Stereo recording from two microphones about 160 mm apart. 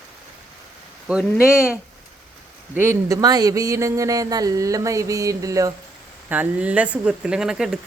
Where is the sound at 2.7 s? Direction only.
15° right (ahead or behind).